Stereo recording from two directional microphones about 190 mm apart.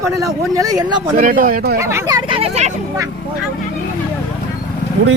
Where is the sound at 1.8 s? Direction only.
15° right (ahead or behind); by 2.7 s 35° right (ahead or behind).